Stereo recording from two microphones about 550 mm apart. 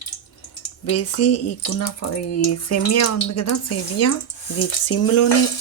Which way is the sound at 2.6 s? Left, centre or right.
Left.